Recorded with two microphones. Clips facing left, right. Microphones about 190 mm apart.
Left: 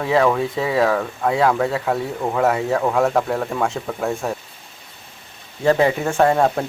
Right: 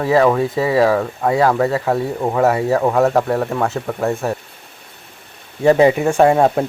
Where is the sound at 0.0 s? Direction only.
Centre (ahead or behind).